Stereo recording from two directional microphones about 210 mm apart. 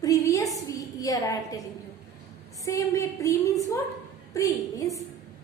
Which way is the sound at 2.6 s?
15° left (ahead or behind).